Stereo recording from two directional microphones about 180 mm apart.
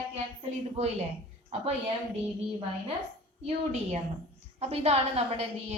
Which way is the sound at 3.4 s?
40° right (ahead or behind).